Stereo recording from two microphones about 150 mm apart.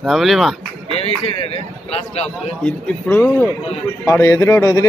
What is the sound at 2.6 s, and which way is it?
A man's voice, 10° left (ahead or behind).